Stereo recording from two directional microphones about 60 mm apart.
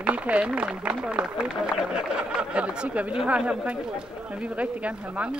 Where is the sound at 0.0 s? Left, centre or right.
Right.